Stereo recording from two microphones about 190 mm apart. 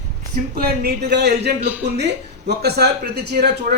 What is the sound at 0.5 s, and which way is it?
Speech, 50° right (ahead or behind).